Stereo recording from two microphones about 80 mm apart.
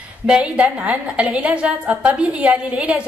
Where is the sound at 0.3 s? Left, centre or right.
Centre.